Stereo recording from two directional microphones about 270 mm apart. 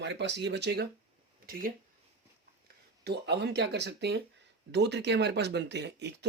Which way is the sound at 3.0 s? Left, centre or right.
Right.